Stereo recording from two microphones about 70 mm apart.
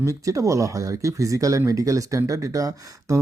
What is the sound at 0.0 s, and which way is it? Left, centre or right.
Speech, right.